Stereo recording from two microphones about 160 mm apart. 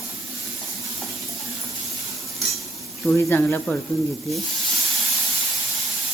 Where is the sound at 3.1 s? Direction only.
15° left (ahead or behind).